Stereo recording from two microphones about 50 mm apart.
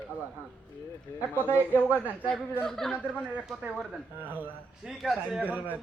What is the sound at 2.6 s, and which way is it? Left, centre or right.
Speech, centre.